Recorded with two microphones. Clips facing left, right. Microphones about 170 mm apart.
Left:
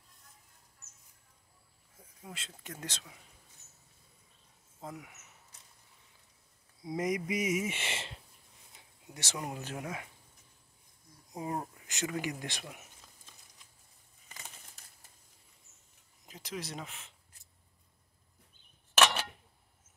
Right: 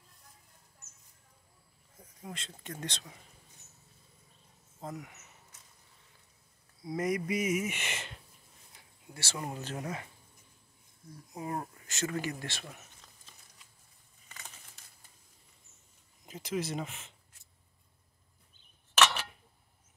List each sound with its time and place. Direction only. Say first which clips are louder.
2.3 s speech: right 2 dB; 5° left (ahead or behind)
4.8 s speech: right 3 dB; 5° left (ahead or behind)
6.8 s speech: right 1 dB; 20° left (ahead or behind)
8.7 s a sound: even; 20° left (ahead or behind)
9.5 s speech: right 1 dB; 10° left (ahead or behind)
11.3 s speech: even; 20° left (ahead or behind)
16.3 s speech: right 7 dB; centre (ahead or behind)